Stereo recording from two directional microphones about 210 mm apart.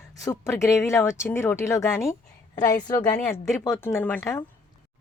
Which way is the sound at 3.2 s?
5° left (ahead or behind).